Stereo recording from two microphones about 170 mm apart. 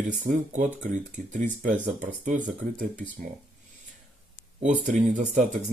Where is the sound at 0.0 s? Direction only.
45° right (ahead or behind).